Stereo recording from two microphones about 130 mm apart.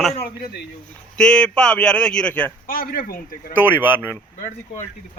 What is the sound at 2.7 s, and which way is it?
Speech, 90° left.